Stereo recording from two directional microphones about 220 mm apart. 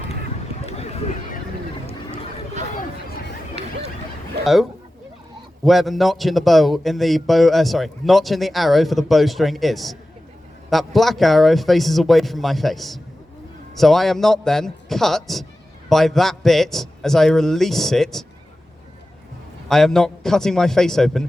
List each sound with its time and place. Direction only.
0.6 s a sound: 30° left (ahead or behind)
4.4 s a man's voice: centre (ahead or behind)
19.6 s a man's voice: centre (ahead or behind)